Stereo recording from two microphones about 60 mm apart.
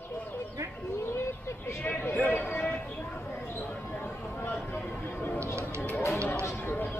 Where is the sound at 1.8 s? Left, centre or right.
Left.